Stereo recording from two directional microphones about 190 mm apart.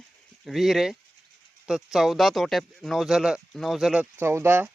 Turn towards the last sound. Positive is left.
turn(degrees=-10)  # may be behind; listen again after turning